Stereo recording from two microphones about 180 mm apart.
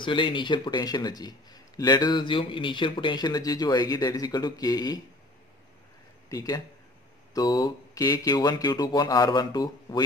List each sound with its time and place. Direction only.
0.0 s speech: 25° left (ahead or behind)
6.2 s speech: 20° left (ahead or behind)